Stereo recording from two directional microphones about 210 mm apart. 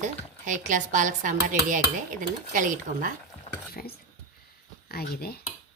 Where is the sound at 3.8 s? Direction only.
40° left (ahead or behind).